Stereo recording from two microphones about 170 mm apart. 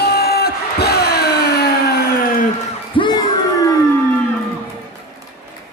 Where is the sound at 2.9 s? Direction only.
30° left (ahead or behind).